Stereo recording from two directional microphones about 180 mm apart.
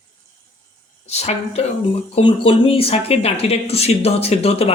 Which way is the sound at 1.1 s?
35° left (ahead or behind).